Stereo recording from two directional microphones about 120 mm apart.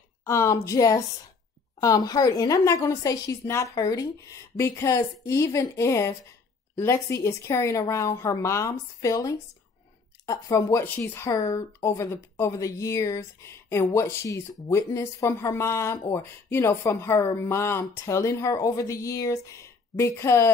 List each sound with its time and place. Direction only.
0.2 s speech: 25° left (ahead or behind)